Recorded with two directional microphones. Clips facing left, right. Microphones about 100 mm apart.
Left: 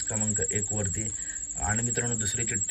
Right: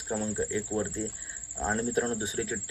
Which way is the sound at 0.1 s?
20° right (ahead or behind).